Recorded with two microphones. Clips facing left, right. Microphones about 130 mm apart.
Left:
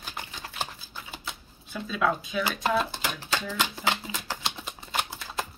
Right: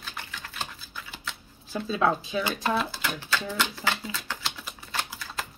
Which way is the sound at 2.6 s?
20° left (ahead or behind).